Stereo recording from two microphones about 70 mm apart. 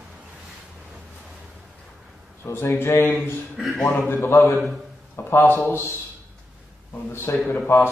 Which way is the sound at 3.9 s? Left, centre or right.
Left.